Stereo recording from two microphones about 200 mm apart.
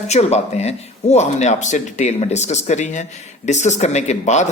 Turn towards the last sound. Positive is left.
turn(degrees=35)  # may be behind; listen again after turning